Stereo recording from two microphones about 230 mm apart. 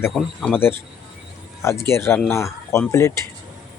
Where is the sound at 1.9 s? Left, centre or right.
Centre.